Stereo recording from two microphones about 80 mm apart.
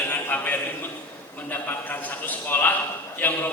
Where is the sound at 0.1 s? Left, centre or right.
Left.